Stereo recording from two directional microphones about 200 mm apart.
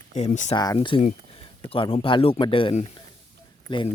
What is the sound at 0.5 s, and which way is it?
Speech, 20° left (ahead or behind).